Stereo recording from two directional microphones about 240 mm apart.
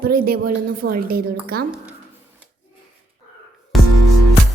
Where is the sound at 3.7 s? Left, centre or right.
Centre.